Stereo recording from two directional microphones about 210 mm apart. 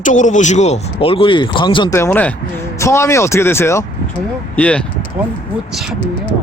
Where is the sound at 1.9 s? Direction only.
10° left (ahead or behind).